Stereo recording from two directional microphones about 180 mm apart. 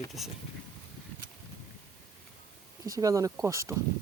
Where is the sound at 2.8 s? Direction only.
20° right (ahead or behind).